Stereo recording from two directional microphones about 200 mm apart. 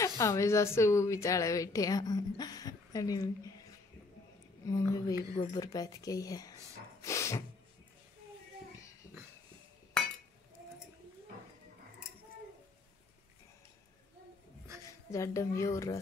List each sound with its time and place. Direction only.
0.2 s a woman's voice: 15° left (ahead or behind)
4.6 s a woman's voice: 15° left (ahead or behind)
7.0 s a sound: 15° left (ahead or behind)
15.0 s a woman's voice: 15° left (ahead or behind)